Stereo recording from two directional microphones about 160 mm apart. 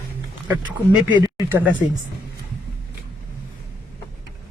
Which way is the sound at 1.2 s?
15° right (ahead or behind).